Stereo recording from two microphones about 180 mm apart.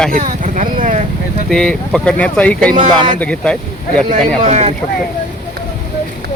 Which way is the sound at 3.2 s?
5° left (ahead or behind).